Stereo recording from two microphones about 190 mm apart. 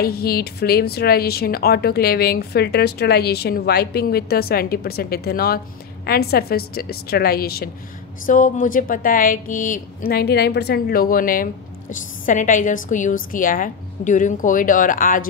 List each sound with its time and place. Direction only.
0.0 s a woman's voice: 55° left (ahead or behind)